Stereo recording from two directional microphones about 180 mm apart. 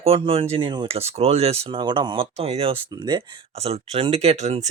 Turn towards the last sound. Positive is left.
turn(degrees=-40)  # may be behind; listen again after turning